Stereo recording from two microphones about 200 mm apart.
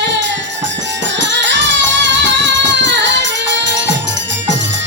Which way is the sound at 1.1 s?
65° right (ahead or behind).